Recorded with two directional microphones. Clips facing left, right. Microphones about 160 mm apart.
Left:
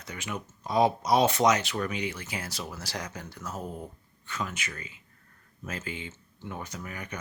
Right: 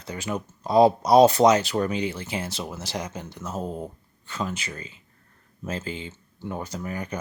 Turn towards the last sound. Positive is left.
turn(degrees=-35)  # may be behind; listen again after turning